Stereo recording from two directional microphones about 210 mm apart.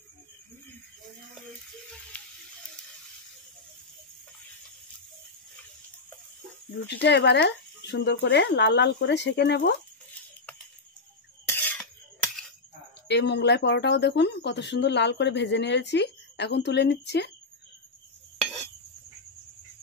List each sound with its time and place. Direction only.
2.1 s ratchet: 5° left (ahead or behind)
7.1 s speech: 55° left (ahead or behind)
11.4 s a sound: 10° left (ahead or behind)
13.1 s speech: 55° left (ahead or behind)